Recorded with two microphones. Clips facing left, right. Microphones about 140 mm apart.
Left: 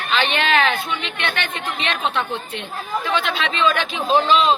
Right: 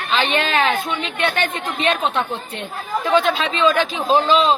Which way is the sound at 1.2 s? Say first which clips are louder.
Right 8 dB; 45° right (ahead or behind).